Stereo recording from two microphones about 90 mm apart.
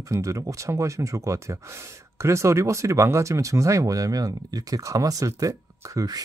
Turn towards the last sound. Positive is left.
turn(degrees=-45)  # may be behind; listen again after turning